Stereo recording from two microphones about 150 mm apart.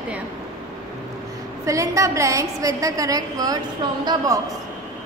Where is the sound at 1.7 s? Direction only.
20° right (ahead or behind).